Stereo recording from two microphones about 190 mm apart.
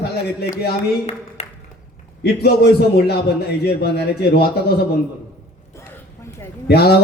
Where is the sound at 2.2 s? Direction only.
60° left (ahead or behind).